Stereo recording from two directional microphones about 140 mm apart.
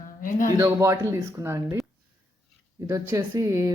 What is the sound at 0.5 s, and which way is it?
Speech, 20° right (ahead or behind).